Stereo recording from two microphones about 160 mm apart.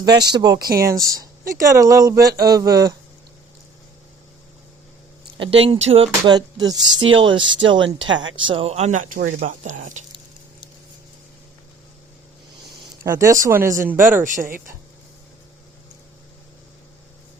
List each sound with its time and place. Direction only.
0.0 s speech: 25° right (ahead or behind)
1.2 s a sound: 20° right (ahead or behind)
1.8 s speech: 20° right (ahead or behind)
5.4 s speech: 35° right (ahead or behind)
13.1 s speech: 20° right (ahead or behind)
14.3 s speech: 60° right (ahead or behind)